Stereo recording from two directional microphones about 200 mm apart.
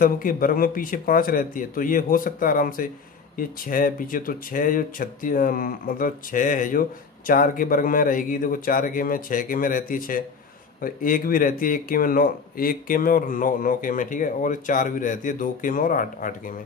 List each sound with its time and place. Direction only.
0.0 s speech: 45° left (ahead or behind)